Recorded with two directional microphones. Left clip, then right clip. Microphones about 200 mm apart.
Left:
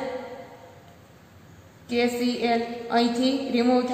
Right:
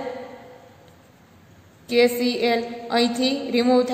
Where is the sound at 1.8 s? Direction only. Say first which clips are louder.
Right 6 dB; 40° right (ahead or behind).